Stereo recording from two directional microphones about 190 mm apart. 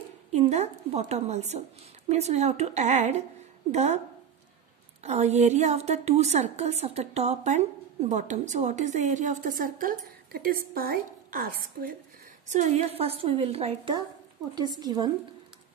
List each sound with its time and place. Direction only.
0.3 s a woman's voice: 35° right (ahead or behind)
5.0 s a woman's voice: 35° right (ahead or behind)
12.4 s a woman's voice: 35° right (ahead or behind); by 15.1 s 20° right (ahead or behind)